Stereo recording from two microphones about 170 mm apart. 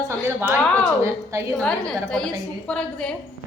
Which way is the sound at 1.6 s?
5° left (ahead or behind).